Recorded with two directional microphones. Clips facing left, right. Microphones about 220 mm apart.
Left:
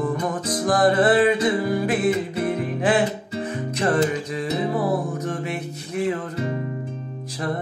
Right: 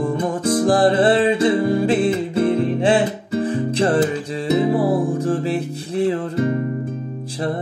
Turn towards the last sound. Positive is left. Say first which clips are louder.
# right 4 dB
turn(degrees=-30)  # may be behind; listen again after turning